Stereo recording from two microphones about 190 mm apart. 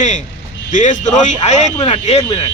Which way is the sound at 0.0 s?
40° left (ahead or behind).